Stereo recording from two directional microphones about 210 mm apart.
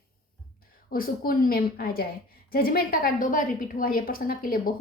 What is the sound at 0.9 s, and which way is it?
A woman's voice, 45° left (ahead or behind).